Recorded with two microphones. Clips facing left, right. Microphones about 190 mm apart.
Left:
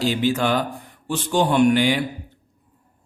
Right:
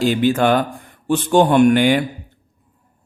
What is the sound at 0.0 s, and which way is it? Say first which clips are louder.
A man's voice: right 5 dB; 55° right (ahead or behind).